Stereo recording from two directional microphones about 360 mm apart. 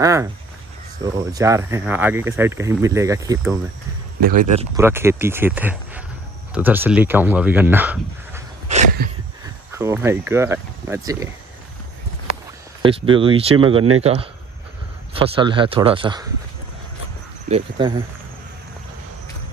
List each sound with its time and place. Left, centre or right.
0.0 s speech: centre
4.2 s speech: right
4.7 s speech: centre
8.6 s a sound: centre
9.8 s speech: centre
12.8 s speech: centre
17.5 s speech: centre